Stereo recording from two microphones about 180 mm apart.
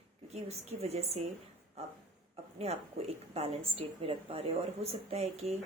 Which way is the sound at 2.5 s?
35° right (ahead or behind).